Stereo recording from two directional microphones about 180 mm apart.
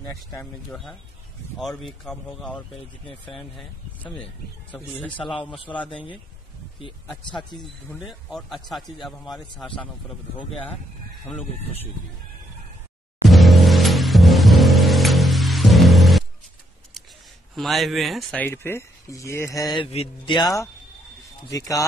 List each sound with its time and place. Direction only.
0.3 s a man's voice: 5° left (ahead or behind)
8.3 s a man's voice: centre (ahead or behind)
13.3 s music: centre (ahead or behind)
17.6 s speech: centre (ahead or behind); by 21.8 s 20° left (ahead or behind)